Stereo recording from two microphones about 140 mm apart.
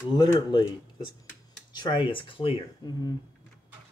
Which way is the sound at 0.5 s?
35° left (ahead or behind).